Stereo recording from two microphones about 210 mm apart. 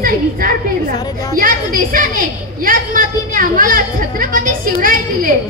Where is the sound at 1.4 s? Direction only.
40° right (ahead or behind).